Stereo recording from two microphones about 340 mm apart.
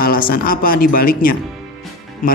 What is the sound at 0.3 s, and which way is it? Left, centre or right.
Speech, left.